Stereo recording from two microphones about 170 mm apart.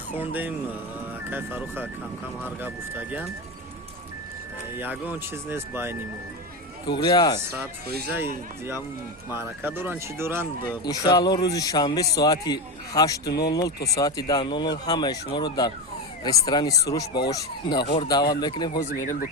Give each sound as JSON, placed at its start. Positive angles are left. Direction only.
{"t": 0.1, "sound": "speech", "side_deg": -10}
{"t": 4.8, "sound": "speech", "side_deg": -10}
{"t": 6.8, "sound": "speech", "side_deg": 30}
{"t": 8.1, "sound": "speech", "side_deg": -15}
{"t": 10.7, "sound": "speech", "side_deg": 25}
{"t": 13.7, "sound": "speech", "side_deg": 70}
{"t": 13.9, "sound": "speech", "side_deg": 20}
{"t": 18.9, "sound": "speech", "side_deg": 50}